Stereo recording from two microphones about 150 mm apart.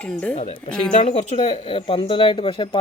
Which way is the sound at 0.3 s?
45° left (ahead or behind).